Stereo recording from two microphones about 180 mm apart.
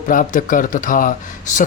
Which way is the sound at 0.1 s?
45° left (ahead or behind).